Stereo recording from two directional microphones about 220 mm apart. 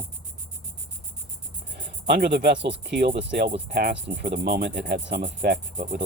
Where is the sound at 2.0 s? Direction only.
50° right (ahead or behind).